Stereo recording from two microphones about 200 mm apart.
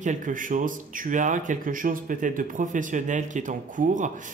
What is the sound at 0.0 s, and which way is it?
Speech, 40° right (ahead or behind).